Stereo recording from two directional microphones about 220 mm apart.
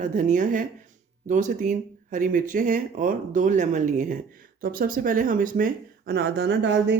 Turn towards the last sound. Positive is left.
turn(degrees=-50)  # may be behind; listen again after turning